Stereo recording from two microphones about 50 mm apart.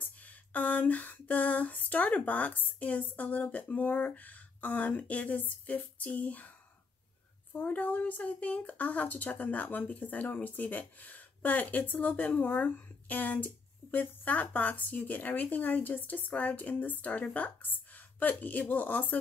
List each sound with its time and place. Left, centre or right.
0.0 s a sound: left
3.5 s speech: left
7.5 s speech: left